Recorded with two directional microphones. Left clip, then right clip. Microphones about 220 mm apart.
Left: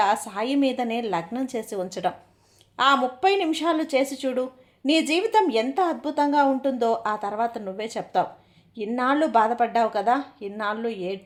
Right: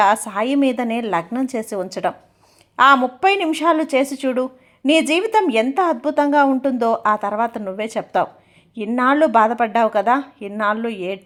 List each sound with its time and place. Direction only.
0.0 s a woman's voice: 20° right (ahead or behind)